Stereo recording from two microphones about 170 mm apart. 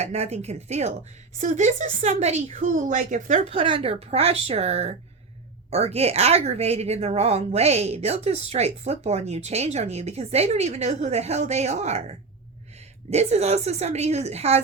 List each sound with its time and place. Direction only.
0.0 s a woman's voice: 40° right (ahead or behind)